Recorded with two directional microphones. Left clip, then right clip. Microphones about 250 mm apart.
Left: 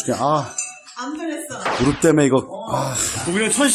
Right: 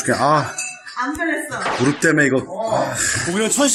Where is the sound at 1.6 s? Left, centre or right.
Centre.